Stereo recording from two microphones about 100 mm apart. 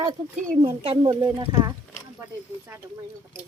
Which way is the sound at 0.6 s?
65° right (ahead or behind).